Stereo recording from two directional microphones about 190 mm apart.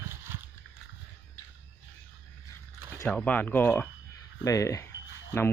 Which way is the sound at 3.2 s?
5° left (ahead or behind).